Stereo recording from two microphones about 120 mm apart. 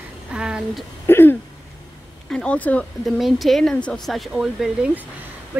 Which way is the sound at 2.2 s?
10° left (ahead or behind).